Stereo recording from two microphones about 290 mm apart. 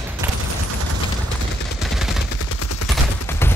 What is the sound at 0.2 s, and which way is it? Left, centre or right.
Fusillade, centre.